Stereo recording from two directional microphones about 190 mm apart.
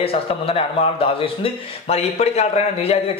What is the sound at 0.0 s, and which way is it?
A man's voice, 30° left (ahead or behind).